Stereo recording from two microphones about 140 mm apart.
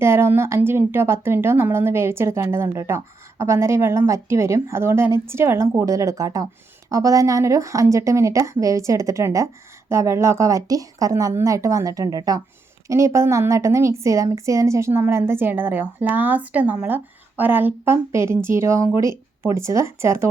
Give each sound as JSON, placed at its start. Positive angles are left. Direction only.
{"t": 0.0, "sound": "a woman's voice", "side_deg": -20}